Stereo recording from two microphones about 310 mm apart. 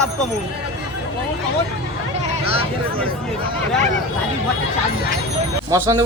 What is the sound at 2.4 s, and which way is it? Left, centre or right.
Speech, centre.